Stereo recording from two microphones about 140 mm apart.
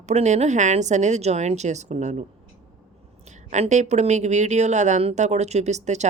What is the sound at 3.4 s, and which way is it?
A woman's voice, 55° right (ahead or behind).